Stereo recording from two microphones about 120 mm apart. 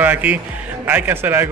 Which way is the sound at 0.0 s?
15° right (ahead or behind).